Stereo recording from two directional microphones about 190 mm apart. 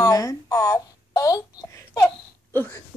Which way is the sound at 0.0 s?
20° left (ahead or behind).